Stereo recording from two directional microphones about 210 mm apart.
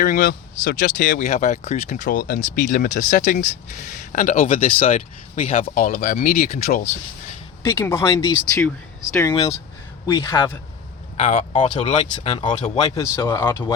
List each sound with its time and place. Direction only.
0.0 s speech: 40° left (ahead or behind)
7.6 s speech: 15° left (ahead or behind)
11.2 s speech: 35° left (ahead or behind)
12.8 s speech: 10° left (ahead or behind)